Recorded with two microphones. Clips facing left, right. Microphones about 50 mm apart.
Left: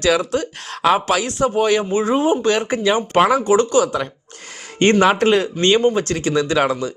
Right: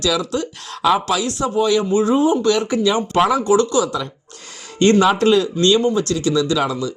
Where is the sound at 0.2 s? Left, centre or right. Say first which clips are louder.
Left 1 dB; left.